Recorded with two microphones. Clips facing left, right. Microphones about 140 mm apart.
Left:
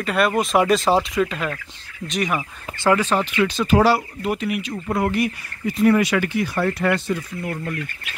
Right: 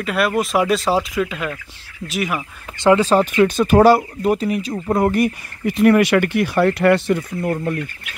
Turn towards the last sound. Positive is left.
turn(degrees=-45)  # may be behind; listen again after turning